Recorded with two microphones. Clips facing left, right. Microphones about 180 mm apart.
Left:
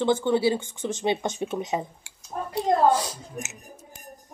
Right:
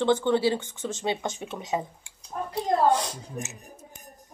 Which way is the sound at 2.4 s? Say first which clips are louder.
Left 1 dB; 40° left (ahead or behind).